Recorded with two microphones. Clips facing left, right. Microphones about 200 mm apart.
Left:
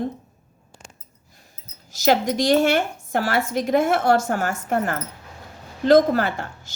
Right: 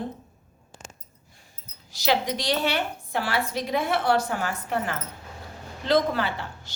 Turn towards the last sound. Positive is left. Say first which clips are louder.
# left 4 dB
turn(degrees=45)  # may be behind; listen again after turning